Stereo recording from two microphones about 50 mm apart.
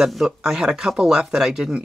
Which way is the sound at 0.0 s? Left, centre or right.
Centre.